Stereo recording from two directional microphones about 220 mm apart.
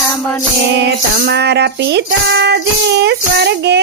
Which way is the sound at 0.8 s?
50° right (ahead or behind).